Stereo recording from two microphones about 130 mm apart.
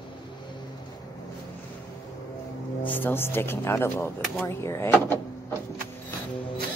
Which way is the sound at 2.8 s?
15° left (ahead or behind).